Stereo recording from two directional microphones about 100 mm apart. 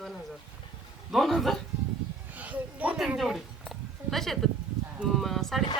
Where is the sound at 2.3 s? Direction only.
15° right (ahead or behind).